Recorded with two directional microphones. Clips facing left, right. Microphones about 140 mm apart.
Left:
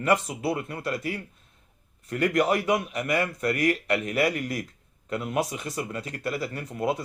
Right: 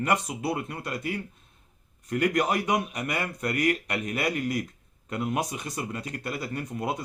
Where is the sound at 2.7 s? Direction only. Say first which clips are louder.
Left 2 dB; 20° right (ahead or behind).